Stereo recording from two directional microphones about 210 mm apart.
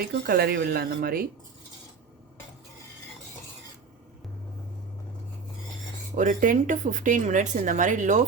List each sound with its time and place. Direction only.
0.0 s speech: 50° right (ahead or behind)
6.1 s a woman's voice: 35° right (ahead or behind)